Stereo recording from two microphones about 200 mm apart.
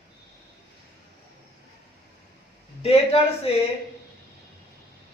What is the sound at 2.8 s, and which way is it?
Speech, 30° left (ahead or behind).